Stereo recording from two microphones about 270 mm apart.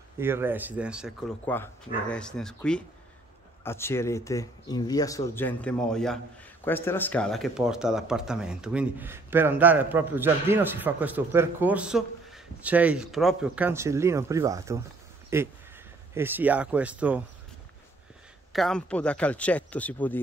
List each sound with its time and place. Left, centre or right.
0.2 s speech: centre
18.5 s speech: centre